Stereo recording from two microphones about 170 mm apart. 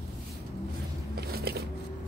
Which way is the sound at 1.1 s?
65° right (ahead or behind).